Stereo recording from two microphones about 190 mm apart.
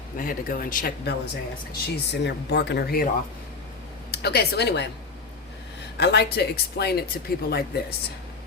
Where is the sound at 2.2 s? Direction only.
65° left (ahead or behind).